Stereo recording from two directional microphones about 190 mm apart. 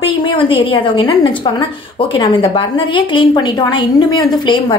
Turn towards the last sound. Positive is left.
turn(degrees=25)  # may be behind; listen again after turning